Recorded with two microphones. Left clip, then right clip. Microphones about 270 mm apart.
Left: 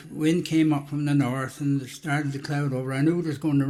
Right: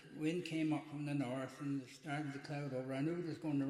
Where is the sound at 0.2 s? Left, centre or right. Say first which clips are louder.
Left 17 dB; left.